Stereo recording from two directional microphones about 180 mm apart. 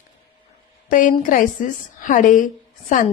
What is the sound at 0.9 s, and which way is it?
A woman's voice, 50° left (ahead or behind).